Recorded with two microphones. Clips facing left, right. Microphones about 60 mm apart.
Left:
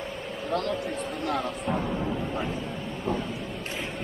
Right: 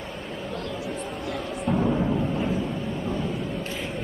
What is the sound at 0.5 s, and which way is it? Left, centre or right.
Speech, left.